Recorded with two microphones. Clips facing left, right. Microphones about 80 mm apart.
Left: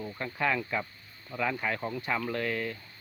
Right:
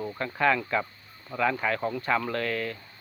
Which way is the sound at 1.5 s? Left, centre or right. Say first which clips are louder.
Right 4 dB; right.